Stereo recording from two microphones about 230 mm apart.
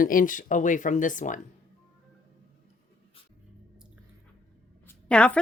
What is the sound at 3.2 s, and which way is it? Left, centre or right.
Dog, left.